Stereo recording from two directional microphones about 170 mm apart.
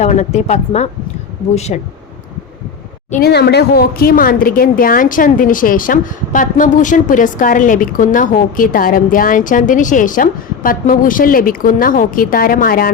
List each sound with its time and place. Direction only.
0.0 s speech: 40° left (ahead or behind)
3.2 s speech: 70° left (ahead or behind)